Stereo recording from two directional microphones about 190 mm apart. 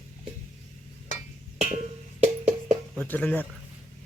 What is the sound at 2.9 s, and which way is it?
Speech, 10° left (ahead or behind).